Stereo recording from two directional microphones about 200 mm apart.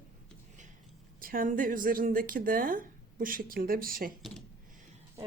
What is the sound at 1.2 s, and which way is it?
Speech, 45° right (ahead or behind).